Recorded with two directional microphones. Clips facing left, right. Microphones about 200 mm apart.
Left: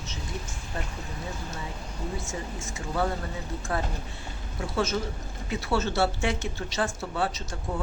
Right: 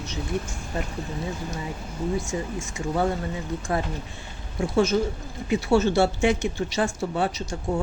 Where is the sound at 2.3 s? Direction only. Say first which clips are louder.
Right 6 dB; 20° right (ahead or behind).